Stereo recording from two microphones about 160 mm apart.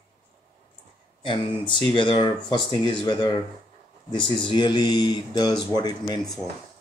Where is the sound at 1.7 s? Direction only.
30° left (ahead or behind).